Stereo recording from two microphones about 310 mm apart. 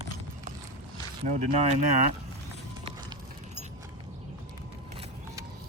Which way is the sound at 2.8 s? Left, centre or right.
Centre.